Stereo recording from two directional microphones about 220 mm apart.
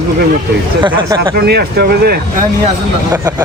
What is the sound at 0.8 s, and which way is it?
Speech, 20° right (ahead or behind).